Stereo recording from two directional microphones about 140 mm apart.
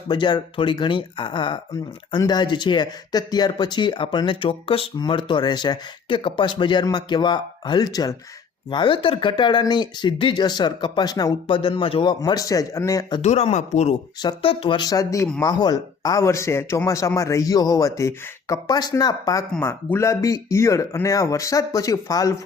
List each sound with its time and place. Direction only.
0.1 s speech: 35° left (ahead or behind)
12.2 s speech: 25° left (ahead or behind)
13.2 s speech: 50° left (ahead or behind)
14.2 s speech: 35° left (ahead or behind)